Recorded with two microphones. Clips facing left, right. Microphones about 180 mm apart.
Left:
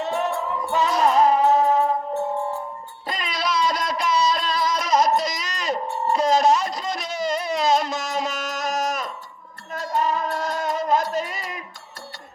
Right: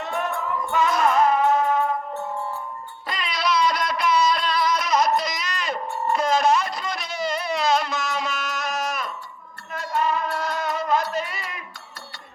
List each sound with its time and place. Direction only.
0.0 s music: 30° left (ahead or behind)
3.1 s a sound: 45° left (ahead or behind)
4.8 s music: 40° left (ahead or behind)